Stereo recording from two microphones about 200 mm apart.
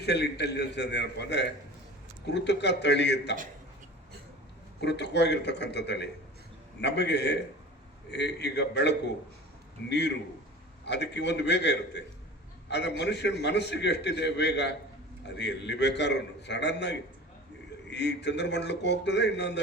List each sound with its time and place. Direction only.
0.0 s a man's voice: 55° left (ahead or behind)
4.8 s a man's voice: 60° left (ahead or behind)
10.8 s a man's voice: 60° left (ahead or behind)
17.9 s a man's voice: 60° left (ahead or behind)